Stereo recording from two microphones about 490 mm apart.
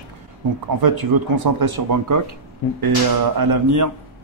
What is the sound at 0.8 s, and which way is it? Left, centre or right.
Speech, right.